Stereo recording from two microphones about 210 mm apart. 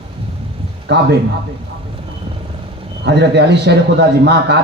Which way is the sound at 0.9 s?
55° right (ahead or behind).